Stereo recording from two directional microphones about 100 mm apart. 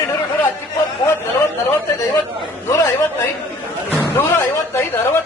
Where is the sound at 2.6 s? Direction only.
30° left (ahead or behind).